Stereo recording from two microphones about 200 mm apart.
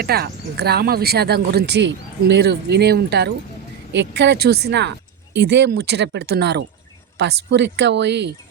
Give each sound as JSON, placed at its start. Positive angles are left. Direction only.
{"t": 0.0, "sound": "speech", "side_deg": -50}